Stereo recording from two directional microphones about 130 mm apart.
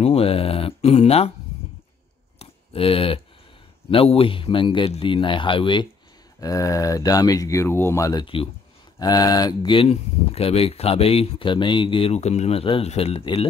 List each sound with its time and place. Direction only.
0.0 s speech: 50° left (ahead or behind)
2.3 s a sound: 45° left (ahead or behind)
3.9 s a man's voice: 45° left (ahead or behind)
6.4 s speech: 25° left (ahead or behind); by 13.5 s 45° left (ahead or behind)